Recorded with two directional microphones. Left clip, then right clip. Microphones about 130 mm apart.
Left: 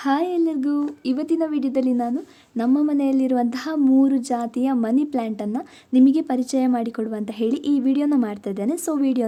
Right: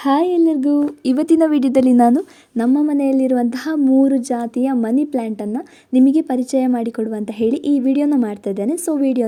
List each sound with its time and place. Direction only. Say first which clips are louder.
0.0 s a woman's voice: right 6 dB; 30° right (ahead or behind)
1.0 s a woman's voice: right 9 dB; 65° right (ahead or behind); by 2.2 s 85° right
2.6 s a woman's voice: right 4 dB; 35° right (ahead or behind)